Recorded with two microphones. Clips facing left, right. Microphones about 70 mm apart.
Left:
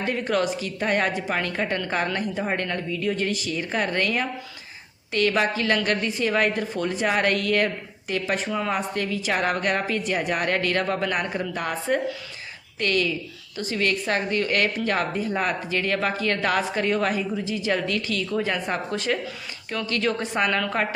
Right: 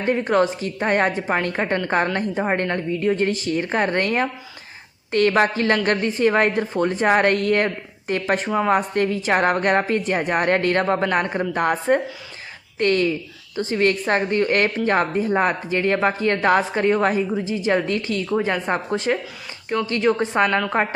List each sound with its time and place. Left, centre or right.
0.0 s a woman's voice: right